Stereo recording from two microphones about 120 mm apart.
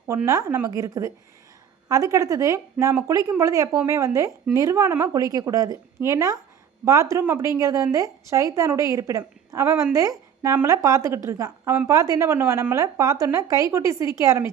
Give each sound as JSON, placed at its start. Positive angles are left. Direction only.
{"t": 0.3, "sound": "a woman's voice", "side_deg": -25}